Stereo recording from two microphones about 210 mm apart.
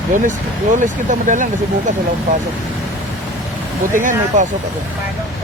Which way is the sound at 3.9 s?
40° right (ahead or behind).